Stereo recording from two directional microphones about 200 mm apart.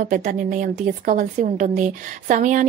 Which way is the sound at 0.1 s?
40° right (ahead or behind).